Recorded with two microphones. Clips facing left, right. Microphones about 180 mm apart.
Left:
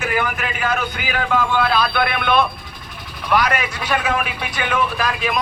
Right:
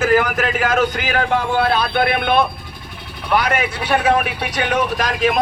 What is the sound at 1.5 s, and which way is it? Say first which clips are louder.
Speech: right 1 dB; 35° right (ahead or behind).